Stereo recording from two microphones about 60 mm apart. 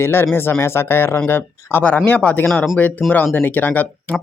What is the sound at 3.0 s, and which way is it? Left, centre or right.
Speech, centre.